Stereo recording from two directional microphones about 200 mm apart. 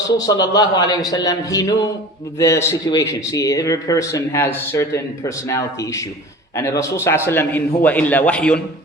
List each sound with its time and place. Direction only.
0.2 s a man's voice: 20° left (ahead or behind)